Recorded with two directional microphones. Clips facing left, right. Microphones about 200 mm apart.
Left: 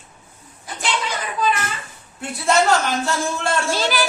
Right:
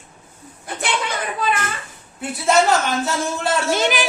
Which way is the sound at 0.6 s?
60° right (ahead or behind).